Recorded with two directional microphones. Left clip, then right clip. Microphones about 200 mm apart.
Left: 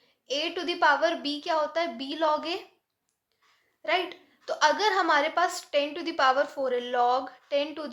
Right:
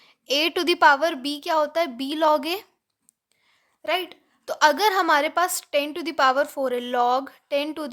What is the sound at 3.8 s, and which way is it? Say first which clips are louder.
A woman's voice: right 2 dB; 50° right (ahead or behind).